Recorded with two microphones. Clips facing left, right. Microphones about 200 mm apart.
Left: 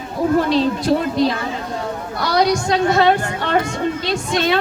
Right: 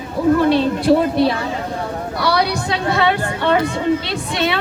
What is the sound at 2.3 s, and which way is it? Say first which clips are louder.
Chatter: left 2 dB; 60° right (ahead or behind).